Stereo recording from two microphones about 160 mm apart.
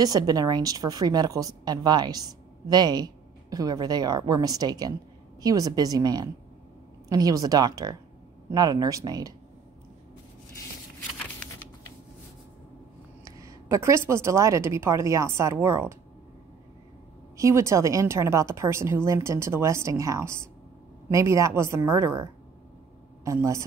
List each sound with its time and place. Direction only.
0.0 s a woman's voice: 25° right (ahead or behind)
13.2 s a woman's voice: 20° right (ahead or behind)
17.4 s a woman's voice: 20° right (ahead or behind)